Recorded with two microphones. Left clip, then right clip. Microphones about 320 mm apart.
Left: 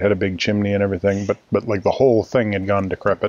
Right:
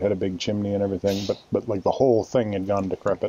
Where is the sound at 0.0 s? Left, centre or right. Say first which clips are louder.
Left 6 dB; left.